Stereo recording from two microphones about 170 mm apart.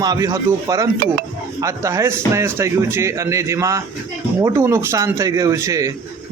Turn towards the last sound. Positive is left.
turn(degrees=-20)  # may be behind; listen again after turning